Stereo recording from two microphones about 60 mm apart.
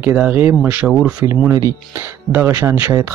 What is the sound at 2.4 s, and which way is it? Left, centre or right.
Speech, right.